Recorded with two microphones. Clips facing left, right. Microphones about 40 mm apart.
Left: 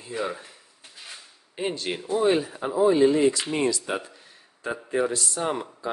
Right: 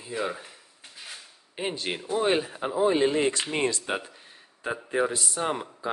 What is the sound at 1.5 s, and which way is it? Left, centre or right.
Speech, centre.